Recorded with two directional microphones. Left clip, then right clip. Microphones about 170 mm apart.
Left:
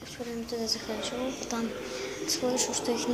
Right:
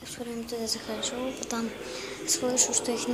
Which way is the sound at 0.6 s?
10° right (ahead or behind).